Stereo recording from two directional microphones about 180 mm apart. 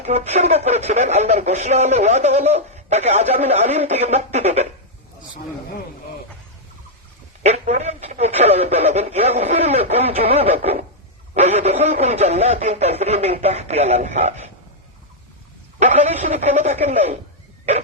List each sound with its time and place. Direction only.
0.0 s speech: 40° right (ahead or behind)
7.4 s speech: 35° right (ahead or behind)
15.8 s speech: 35° right (ahead or behind)